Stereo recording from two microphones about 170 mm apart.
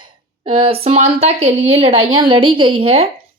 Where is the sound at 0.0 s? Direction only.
30° right (ahead or behind).